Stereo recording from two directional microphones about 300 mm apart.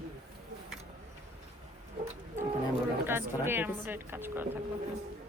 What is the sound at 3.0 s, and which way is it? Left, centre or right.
Speech, centre.